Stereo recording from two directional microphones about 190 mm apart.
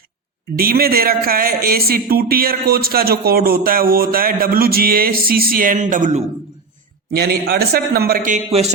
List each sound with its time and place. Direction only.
0.5 s speech: 50° right (ahead or behind)
7.1 s a man's voice: 55° right (ahead or behind)
8.4 s speech: 30° right (ahead or behind)